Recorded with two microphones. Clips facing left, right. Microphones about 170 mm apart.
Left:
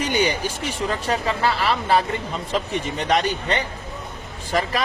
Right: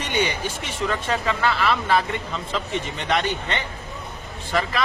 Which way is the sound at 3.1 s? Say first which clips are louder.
Left 2 dB; 40° left (ahead or behind).